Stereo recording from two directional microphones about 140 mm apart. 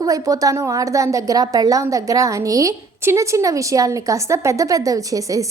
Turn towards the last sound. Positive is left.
turn(degrees=-25)  # may be behind; listen again after turning